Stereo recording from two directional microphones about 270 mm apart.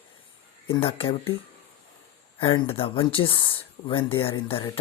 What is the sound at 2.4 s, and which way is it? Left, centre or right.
Speech, centre.